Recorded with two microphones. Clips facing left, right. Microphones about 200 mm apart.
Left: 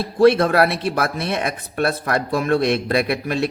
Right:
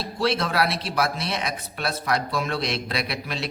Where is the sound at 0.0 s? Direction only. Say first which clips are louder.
Left 11 dB; 55° left (ahead or behind).